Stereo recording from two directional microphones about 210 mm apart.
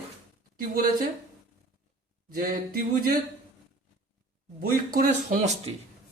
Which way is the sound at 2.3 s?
45° right (ahead or behind).